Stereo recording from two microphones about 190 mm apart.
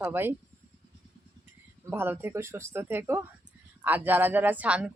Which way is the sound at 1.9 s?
10° right (ahead or behind).